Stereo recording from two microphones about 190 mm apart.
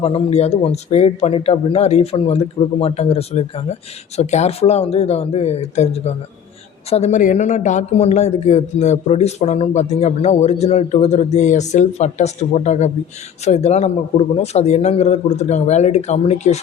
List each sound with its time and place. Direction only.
0.0 s speech: 30° left (ahead or behind)